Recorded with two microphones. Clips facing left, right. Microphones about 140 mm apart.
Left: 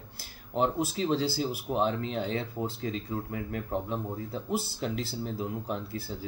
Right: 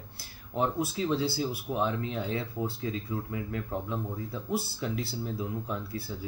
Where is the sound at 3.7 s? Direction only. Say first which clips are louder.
Left 2 dB; 25° left (ahead or behind).